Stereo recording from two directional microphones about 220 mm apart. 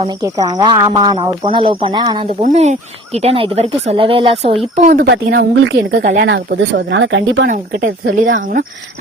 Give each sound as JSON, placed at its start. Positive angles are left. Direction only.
{"t": 0.2, "sound": "speech", "side_deg": -15}
{"t": 2.4, "sound": "speech", "side_deg": -30}
{"t": 5.0, "sound": "speech", "side_deg": -50}
{"t": 7.4, "sound": "speech", "side_deg": -40}